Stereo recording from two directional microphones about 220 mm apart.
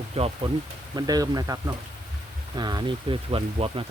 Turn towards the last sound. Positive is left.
turn(degrees=-25)  # may be behind; listen again after turning